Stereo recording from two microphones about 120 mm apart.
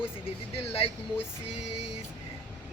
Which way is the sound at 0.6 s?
55° left (ahead or behind).